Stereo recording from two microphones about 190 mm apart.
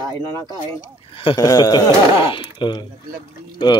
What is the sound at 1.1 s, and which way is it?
Speech, 25° left (ahead or behind).